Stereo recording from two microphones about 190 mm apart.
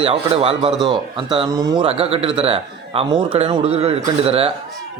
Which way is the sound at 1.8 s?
30° right (ahead or behind).